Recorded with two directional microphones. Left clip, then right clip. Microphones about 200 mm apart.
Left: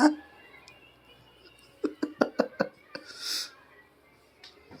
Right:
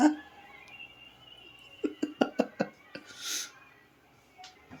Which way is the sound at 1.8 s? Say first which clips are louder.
Left 2 dB; 5° right (ahead or behind).